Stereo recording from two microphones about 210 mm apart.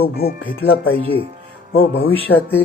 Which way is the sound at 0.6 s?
75° left (ahead or behind).